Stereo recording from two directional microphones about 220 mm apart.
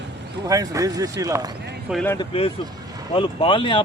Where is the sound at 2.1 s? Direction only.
25° left (ahead or behind).